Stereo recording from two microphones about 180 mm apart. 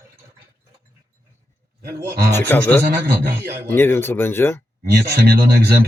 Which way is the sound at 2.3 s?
10° left (ahead or behind).